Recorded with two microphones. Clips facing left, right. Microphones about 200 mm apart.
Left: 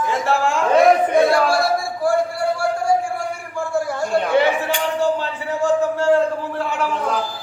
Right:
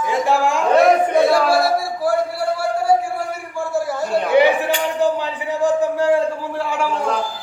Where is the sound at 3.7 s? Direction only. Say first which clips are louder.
Even; 5° right (ahead or behind).